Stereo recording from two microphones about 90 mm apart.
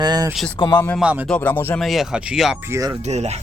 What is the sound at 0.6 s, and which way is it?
Speech, 55° left (ahead or behind).